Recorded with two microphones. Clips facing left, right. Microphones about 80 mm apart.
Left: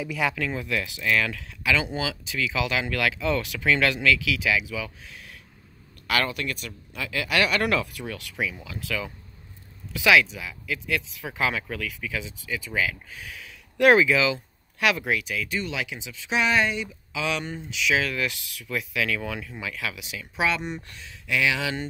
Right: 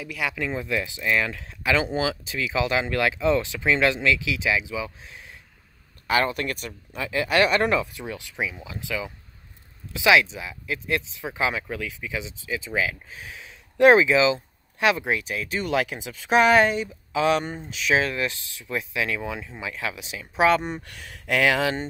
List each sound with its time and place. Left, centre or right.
0.0 s speech: centre
0.4 s speech: right
6.4 s speech: right
15.6 s speech: right
21.1 s speech: right